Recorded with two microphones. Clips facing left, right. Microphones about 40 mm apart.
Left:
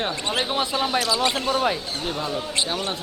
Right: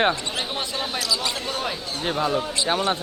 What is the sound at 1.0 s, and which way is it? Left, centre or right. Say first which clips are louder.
Speech: left 4 dB; left.